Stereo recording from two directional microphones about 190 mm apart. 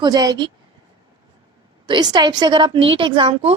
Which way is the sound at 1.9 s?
20° right (ahead or behind).